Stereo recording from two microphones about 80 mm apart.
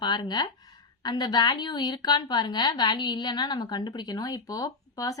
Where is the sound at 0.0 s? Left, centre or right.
Left.